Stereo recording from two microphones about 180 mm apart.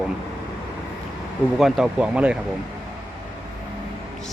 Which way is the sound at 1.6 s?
Centre (ahead or behind).